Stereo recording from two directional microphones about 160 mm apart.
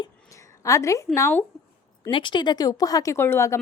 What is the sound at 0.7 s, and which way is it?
Speech, 20° left (ahead or behind).